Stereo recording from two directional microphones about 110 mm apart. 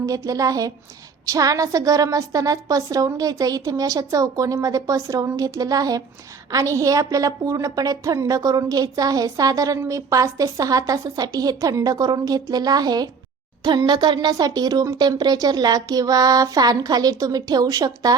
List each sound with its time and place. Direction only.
0.0 s a woman's voice: 30° right (ahead or behind)